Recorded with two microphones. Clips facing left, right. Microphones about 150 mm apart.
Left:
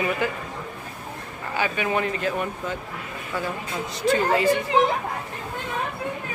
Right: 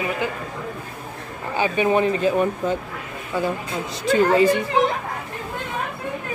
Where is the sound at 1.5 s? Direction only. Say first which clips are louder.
Right 6 dB; 25° right (ahead or behind).